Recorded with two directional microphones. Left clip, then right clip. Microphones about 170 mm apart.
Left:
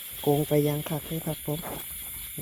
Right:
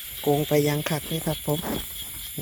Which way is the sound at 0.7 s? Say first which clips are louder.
Right 5 dB; 20° right (ahead or behind).